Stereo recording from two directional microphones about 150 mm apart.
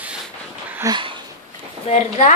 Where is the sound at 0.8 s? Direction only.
30° right (ahead or behind).